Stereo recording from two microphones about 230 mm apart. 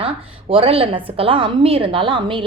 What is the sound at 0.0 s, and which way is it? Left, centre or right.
A woman's voice, right.